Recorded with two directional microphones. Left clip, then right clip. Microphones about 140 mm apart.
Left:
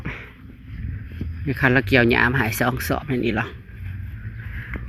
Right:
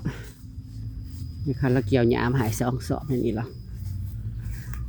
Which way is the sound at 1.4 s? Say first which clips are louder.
Left 7 dB; 5° right (ahead or behind).